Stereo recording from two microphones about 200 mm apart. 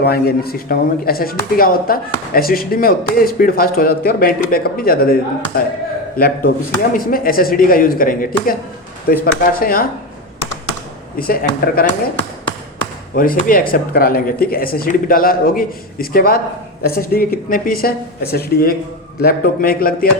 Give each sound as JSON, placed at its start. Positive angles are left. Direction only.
{"t": 0.0, "sound": "speech", "side_deg": 50}
{"t": 11.2, "sound": "speech", "side_deg": 50}
{"t": 13.1, "sound": "speech", "side_deg": 45}